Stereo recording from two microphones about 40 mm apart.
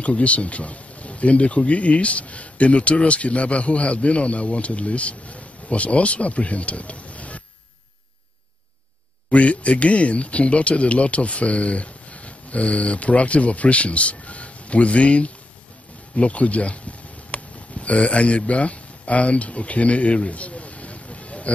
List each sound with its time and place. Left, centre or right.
0.0 s speech: left
9.3 s speech: left
16.2 s a sound: left